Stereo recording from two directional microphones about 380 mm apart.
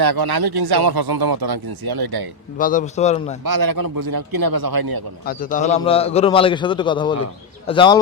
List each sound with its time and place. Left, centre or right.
0.0 s speech: right
2.6 s a man's voice: left
3.4 s a man's voice: right
5.2 s a man's voice: left